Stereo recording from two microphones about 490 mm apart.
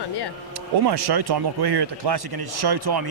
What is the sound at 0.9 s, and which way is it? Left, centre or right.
A man's voice, right.